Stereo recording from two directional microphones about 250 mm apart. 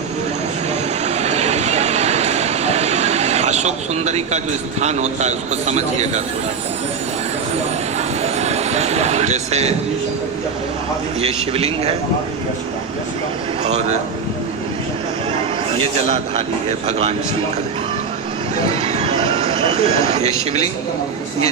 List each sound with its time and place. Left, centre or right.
1.0 s vehicle: right
4.8 s speech: right
8.2 s music: right
11.2 s speech: right
13.7 s speech: right
15.8 s speech: right
18.6 s a sound: right